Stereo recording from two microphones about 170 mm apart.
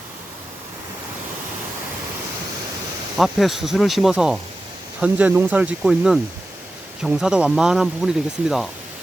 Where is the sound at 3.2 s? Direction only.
Centre (ahead or behind).